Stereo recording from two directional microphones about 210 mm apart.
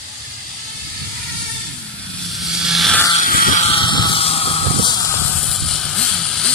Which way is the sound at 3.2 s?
40° left (ahead or behind).